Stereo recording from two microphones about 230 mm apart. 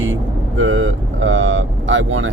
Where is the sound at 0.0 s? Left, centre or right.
Right.